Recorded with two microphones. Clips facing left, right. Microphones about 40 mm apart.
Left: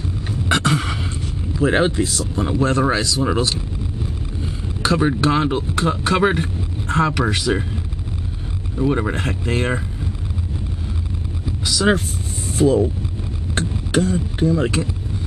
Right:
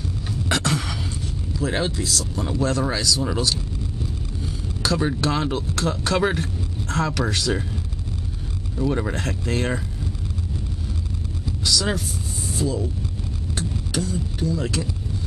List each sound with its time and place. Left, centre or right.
0.3 s a sound: centre
1.5 s speech: left
11.4 s vehicle: centre
12.5 s speech: left